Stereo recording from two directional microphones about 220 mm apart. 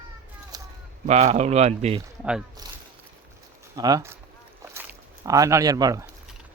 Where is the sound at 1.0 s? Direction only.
30° right (ahead or behind).